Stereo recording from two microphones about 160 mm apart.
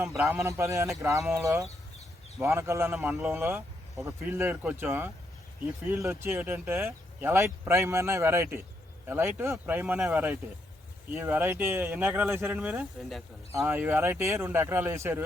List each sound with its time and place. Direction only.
0.2 s a man's voice: 15° right (ahead or behind)